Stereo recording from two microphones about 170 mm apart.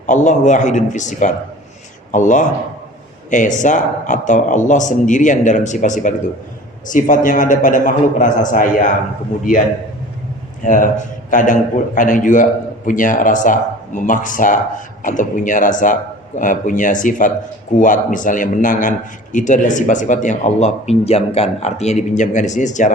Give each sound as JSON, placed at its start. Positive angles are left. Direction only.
{"t": 0.1, "sound": "a man's voice", "side_deg": 45}
{"t": 10.6, "sound": "a man's voice", "side_deg": 50}